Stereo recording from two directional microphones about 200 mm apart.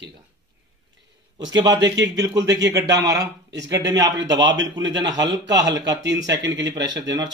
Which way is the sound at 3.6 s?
20° right (ahead or behind).